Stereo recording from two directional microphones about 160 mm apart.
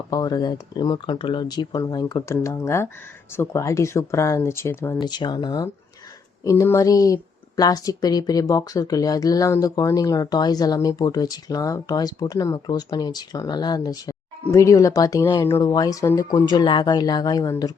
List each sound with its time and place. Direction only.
0.1 s a woman's voice: 25° left (ahead or behind)
4.9 s a woman's voice: 25° left (ahead or behind)